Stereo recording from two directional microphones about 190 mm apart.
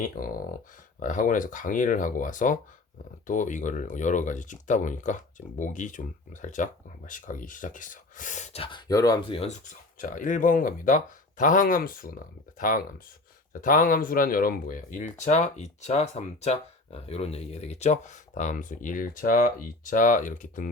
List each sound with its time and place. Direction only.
0.0 s speech: 45° left (ahead or behind); by 9.6 s 30° left (ahead or behind)
10.0 s speech: 45° left (ahead or behind)